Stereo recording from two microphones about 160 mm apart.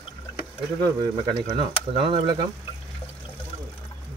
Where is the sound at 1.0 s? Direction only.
30° right (ahead or behind).